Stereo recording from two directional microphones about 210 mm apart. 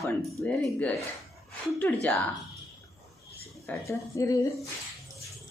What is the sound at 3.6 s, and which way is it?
Speech, 15° left (ahead or behind).